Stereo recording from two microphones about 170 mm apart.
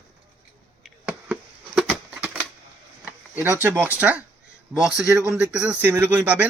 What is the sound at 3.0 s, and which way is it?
A man's voice, 10° right (ahead or behind).